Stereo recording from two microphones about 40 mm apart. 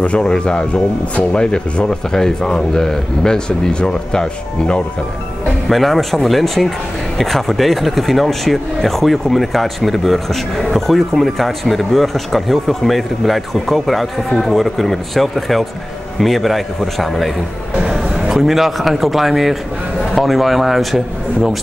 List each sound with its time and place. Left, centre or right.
0.0 s speech: left
5.7 s speech: centre
17.7 s speech: centre